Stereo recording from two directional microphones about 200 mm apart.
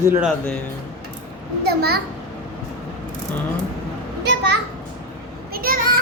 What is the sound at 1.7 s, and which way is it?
Speech, 50° right (ahead or behind).